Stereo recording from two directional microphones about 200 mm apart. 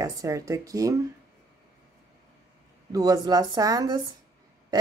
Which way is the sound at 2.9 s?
20° right (ahead or behind).